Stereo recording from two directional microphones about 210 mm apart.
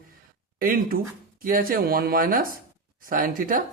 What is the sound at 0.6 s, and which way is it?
A man's voice, 45° right (ahead or behind).